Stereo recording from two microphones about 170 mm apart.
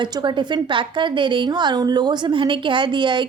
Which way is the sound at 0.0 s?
25° right (ahead or behind).